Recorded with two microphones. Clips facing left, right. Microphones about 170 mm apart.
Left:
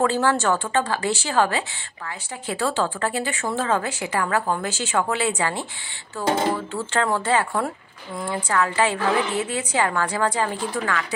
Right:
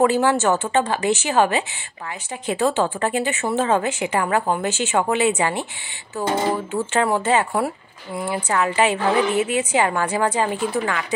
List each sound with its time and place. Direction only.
0.0 s a woman's voice: 15° right (ahead or behind)